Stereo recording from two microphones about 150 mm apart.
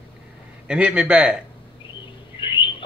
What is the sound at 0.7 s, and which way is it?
Speech, 5° right (ahead or behind).